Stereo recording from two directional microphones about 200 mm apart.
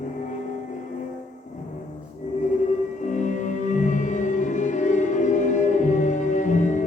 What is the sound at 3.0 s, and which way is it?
Music, 40° left (ahead or behind).